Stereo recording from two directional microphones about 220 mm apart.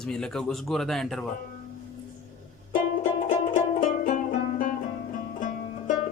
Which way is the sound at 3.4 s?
35° left (ahead or behind).